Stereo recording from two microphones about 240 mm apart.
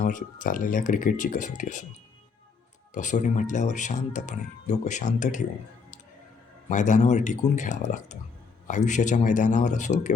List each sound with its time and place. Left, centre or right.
0.0 s speech: left
2.9 s speech: left
6.7 s speech: left